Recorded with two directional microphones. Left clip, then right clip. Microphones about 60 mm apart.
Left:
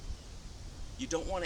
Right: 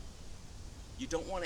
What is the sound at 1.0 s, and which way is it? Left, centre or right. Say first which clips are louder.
Speech: left 2 dB; right.